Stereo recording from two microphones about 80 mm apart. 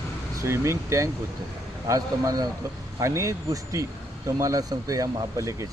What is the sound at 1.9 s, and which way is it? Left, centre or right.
Speech, right.